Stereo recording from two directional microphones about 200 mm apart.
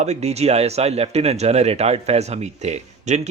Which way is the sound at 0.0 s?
35° right (ahead or behind).